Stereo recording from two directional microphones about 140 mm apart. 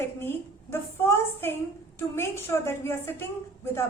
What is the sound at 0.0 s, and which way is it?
A woman's voice, 15° left (ahead or behind).